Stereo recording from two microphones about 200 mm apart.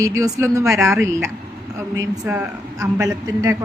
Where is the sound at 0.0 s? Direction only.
15° right (ahead or behind).